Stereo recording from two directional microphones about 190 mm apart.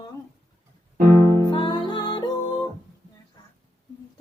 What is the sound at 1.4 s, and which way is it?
Music, 25° left (ahead or behind).